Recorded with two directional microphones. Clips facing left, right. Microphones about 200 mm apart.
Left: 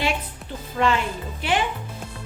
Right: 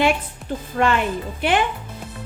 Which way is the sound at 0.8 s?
55° right (ahead or behind).